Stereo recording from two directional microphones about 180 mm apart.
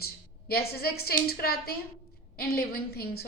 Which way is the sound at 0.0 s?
60° left (ahead or behind).